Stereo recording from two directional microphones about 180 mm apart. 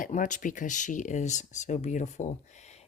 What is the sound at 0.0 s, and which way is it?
Speech, 45° left (ahead or behind).